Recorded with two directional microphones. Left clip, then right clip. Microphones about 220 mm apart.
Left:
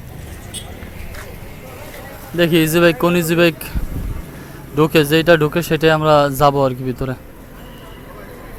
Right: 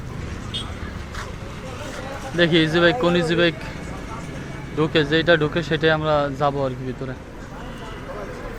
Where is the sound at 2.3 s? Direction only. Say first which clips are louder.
Left 3 dB; 20° left (ahead or behind).